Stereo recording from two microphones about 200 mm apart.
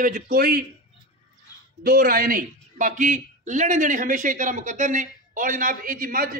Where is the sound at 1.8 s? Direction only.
45° right (ahead or behind).